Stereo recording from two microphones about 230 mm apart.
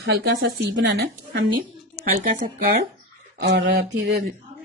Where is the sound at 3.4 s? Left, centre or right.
Right.